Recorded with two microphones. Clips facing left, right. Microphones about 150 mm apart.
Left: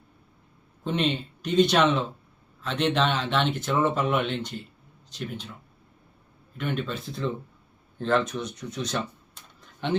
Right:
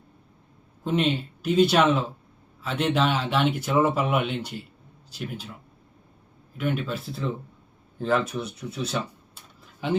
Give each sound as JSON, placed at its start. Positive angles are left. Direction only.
{"t": 0.9, "sound": "speech", "side_deg": -5}
{"t": 6.6, "sound": "speech", "side_deg": -5}